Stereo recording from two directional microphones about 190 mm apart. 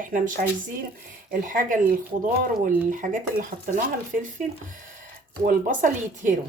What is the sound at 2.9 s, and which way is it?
Speech, 45° right (ahead or behind).